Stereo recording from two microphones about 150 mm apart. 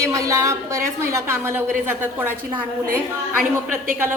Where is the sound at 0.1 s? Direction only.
20° right (ahead or behind).